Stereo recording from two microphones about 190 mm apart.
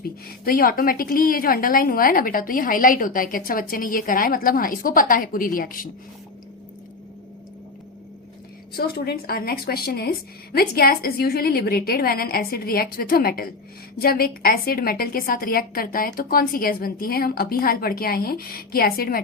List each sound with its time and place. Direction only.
0.0 s a woman's voice: 50° left (ahead or behind)
8.7 s a woman's voice: 55° left (ahead or behind)